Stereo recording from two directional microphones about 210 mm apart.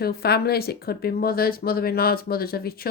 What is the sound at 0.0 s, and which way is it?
Speech, 50° left (ahead or behind).